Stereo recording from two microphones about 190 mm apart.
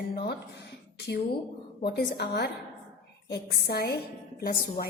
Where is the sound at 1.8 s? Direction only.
60° left (ahead or behind).